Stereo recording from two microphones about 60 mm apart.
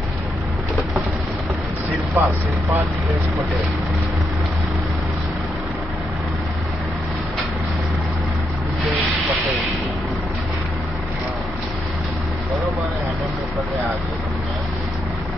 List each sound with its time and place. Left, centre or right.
2.1 s speech: right